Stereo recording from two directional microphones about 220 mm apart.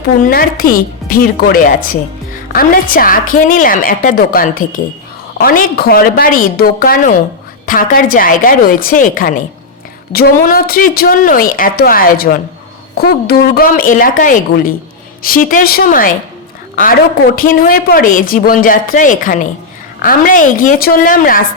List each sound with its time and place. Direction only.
0.2 s speech: 40° left (ahead or behind)
17.3 s speech: 40° left (ahead or behind)